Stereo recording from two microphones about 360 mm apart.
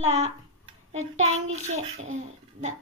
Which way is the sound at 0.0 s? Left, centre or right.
Centre.